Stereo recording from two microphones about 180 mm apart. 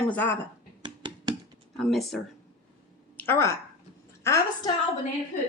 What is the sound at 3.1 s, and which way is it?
Speech, 15° left (ahead or behind).